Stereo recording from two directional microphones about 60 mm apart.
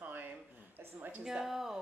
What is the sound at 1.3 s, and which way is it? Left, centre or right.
Speech, centre.